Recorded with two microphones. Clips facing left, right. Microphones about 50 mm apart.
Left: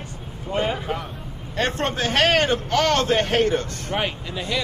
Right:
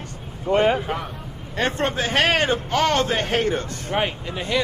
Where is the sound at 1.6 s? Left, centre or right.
Right.